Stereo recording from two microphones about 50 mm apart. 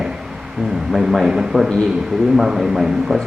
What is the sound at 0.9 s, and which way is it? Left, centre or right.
A man's voice, centre.